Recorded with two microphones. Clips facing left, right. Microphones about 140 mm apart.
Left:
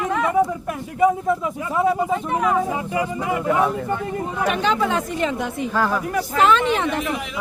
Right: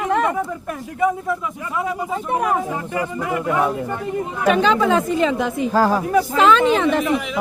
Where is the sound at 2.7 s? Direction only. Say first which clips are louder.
Left 1 dB; 15° left (ahead or behind).